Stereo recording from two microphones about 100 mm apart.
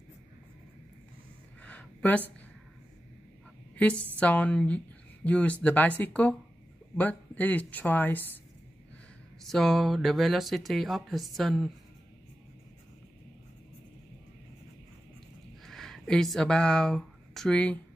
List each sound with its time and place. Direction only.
1.6 s a sound: 15° left (ahead or behind)
3.7 s a woman's voice: 15° left (ahead or behind)
9.4 s speech: 5° left (ahead or behind)
15.6 s speech: 5° left (ahead or behind)